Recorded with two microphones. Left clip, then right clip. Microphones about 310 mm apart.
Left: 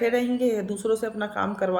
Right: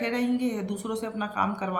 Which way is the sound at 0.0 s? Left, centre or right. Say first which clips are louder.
Left 6 dB; right.